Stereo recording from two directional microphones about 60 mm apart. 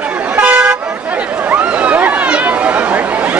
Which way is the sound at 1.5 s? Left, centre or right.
Right.